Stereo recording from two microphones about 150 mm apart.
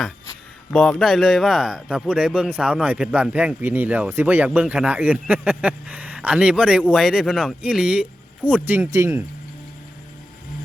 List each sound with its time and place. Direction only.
0.7 s a man's voice: 5° left (ahead or behind); by 9.2 s 20° right (ahead or behind)